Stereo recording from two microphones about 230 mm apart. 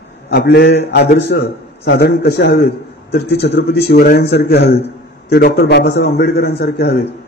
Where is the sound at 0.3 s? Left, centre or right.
Left.